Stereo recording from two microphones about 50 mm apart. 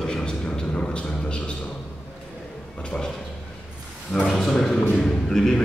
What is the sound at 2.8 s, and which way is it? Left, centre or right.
Speech, centre.